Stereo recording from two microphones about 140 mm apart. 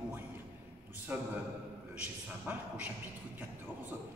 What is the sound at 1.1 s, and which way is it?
Speech, 10° right (ahead or behind).